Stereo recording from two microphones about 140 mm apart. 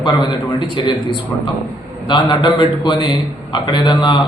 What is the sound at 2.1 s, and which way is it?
A man's voice, 35° left (ahead or behind).